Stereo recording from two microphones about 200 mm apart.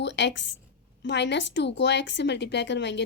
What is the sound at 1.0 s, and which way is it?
A woman's voice, 60° left (ahead or behind).